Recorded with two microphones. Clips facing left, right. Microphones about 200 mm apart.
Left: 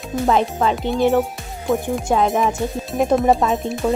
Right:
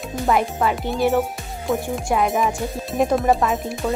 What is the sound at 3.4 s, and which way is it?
Speech, 25° left (ahead or behind).